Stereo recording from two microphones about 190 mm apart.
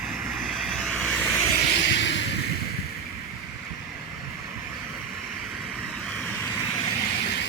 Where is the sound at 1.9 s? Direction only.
70° left (ahead or behind).